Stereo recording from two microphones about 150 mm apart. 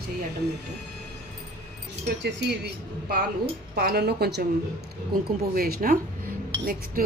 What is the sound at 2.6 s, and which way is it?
Speech, 90° right.